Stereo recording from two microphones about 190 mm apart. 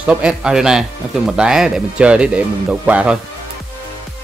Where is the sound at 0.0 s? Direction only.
5° right (ahead or behind).